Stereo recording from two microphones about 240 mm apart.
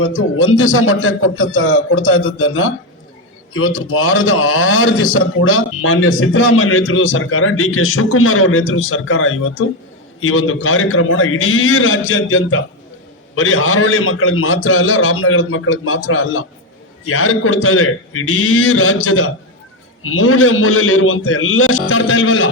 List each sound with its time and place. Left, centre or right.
0.0 s a man's voice: left